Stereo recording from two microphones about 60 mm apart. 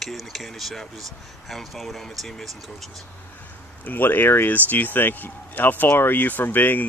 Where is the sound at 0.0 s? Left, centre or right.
Centre.